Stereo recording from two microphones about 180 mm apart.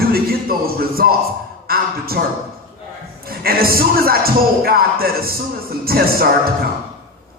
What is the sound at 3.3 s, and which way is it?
A man's voice, 55° right (ahead or behind).